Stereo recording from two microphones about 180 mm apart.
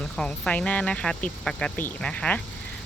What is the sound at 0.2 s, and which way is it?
A woman's voice, 5° left (ahead or behind).